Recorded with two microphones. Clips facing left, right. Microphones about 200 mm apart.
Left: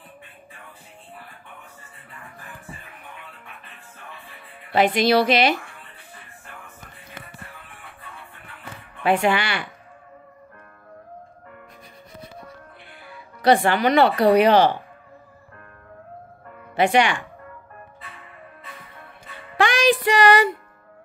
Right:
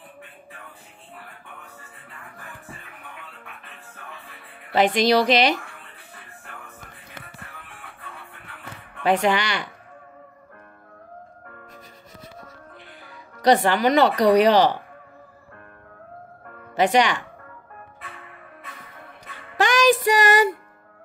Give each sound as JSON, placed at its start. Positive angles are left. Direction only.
{"t": 5.0, "sound": "speech", "side_deg": -45}
{"t": 9.0, "sound": "speech", "side_deg": -45}
{"t": 13.0, "sound": "speech", "side_deg": -40}
{"t": 16.7, "sound": "speech", "side_deg": -45}
{"t": 19.5, "sound": "music", "side_deg": -45}